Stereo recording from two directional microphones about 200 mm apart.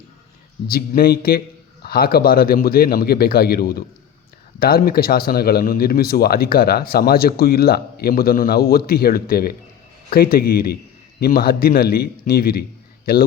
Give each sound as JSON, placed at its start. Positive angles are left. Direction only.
{"t": 0.7, "sound": "a man's voice", "side_deg": 50}